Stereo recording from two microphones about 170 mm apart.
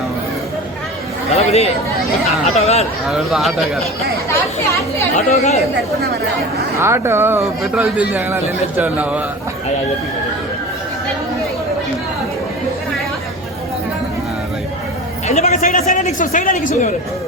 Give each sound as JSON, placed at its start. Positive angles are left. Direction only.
{"t": 1.3, "sound": "chatter", "side_deg": 40}
{"t": 2.6, "sound": "speech", "side_deg": 40}
{"t": 3.1, "sound": "speech", "side_deg": 0}
{"t": 4.3, "sound": "speech", "side_deg": 15}
{"t": 5.1, "sound": "speech", "side_deg": 40}
{"t": 6.7, "sound": "speech", "side_deg": -15}
{"t": 15.3, "sound": "a sound", "side_deg": 40}
{"t": 15.8, "sound": "a woman's voice", "side_deg": 45}